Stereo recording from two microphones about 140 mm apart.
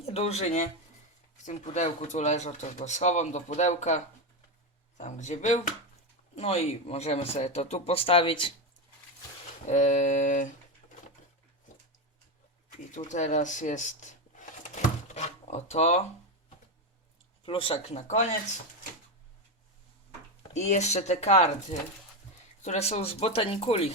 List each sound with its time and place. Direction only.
0.0 s speech: 50° left (ahead or behind)
6.3 s speech: 45° left (ahead or behind)
9.6 s speech: 55° left (ahead or behind)
12.9 s a sound: 60° left (ahead or behind)
17.4 s speech: 40° left (ahead or behind); by 18.3 s 55° left (ahead or behind)
20.5 s speech: 55° left (ahead or behind)